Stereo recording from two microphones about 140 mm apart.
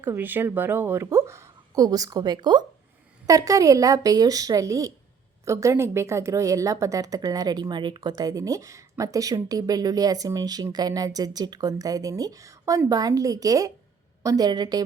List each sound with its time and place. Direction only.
0.0 s a woman's voice: 15° right (ahead or behind)